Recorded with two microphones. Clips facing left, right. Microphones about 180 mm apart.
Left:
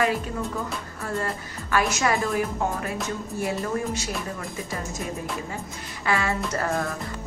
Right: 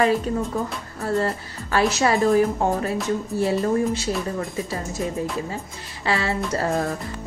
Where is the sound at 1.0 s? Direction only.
35° right (ahead or behind).